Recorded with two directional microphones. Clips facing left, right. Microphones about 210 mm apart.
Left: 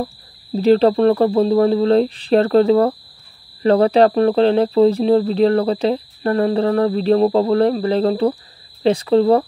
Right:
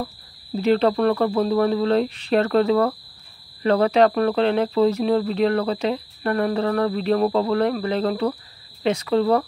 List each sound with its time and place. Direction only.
0.0 s speech: 30° left (ahead or behind)